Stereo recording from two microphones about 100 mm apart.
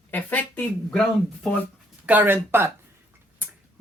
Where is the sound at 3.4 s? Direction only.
20° right (ahead or behind).